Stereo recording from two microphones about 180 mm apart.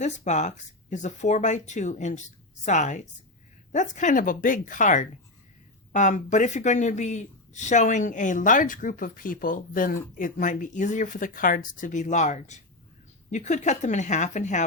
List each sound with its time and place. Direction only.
0.0 s speech: 40° left (ahead or behind)